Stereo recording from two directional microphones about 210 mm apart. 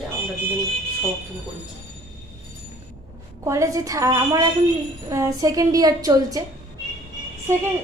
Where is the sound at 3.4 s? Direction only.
15° right (ahead or behind).